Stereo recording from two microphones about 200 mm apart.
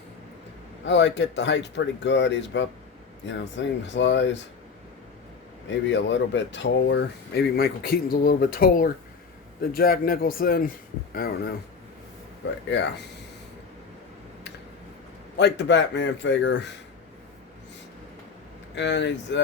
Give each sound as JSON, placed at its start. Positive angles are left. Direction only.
{"t": 0.9, "sound": "speech", "side_deg": 60}
{"t": 5.8, "sound": "speech", "side_deg": 65}
{"t": 15.4, "sound": "speech", "side_deg": 60}
{"t": 18.7, "sound": "speech", "side_deg": 60}